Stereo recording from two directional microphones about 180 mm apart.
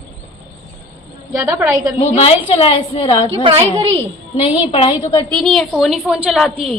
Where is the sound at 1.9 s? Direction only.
35° left (ahead or behind).